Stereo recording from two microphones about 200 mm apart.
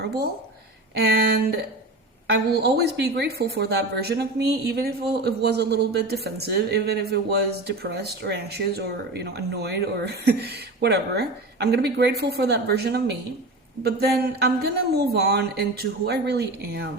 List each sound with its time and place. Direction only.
2.2 s speech: 55° right (ahead or behind)